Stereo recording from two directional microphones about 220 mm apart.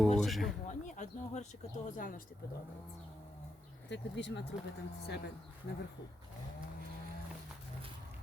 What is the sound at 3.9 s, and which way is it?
Speech, 50° left (ahead or behind).